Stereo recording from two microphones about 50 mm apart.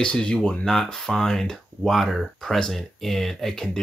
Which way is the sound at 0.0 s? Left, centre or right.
Centre.